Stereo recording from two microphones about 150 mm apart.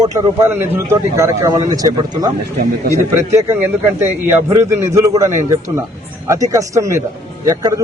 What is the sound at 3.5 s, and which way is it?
A man's voice, 15° right (ahead or behind).